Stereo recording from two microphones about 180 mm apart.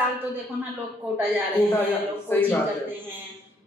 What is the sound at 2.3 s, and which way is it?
Speech, 10° left (ahead or behind).